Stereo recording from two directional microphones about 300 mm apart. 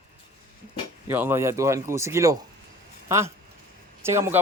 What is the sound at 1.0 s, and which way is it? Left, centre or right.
Speech, centre.